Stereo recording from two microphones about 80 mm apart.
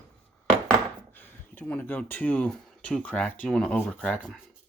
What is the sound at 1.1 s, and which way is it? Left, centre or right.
Speech, left.